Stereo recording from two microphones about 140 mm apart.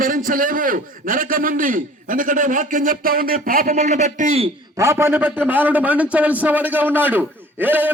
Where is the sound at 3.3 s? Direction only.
75° right (ahead or behind); by 4.4 s 55° right (ahead or behind).